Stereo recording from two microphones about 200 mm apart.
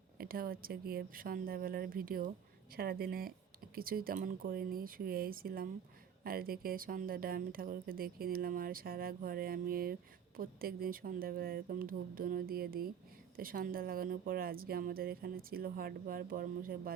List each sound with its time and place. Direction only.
0.2 s speech: 45° right (ahead or behind)